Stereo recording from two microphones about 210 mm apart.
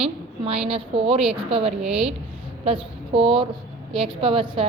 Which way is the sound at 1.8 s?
5° right (ahead or behind).